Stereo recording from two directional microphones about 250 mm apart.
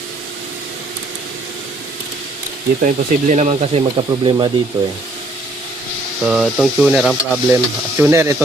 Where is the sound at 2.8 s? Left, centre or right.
Right.